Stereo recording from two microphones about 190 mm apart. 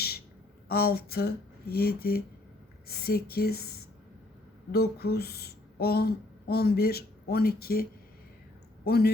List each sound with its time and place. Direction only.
0.7 s speech: 55° left (ahead or behind)